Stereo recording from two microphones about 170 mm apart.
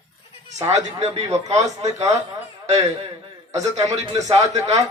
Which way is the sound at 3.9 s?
40° right (ahead or behind).